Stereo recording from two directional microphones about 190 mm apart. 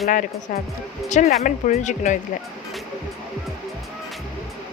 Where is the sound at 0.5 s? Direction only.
45° left (ahead or behind).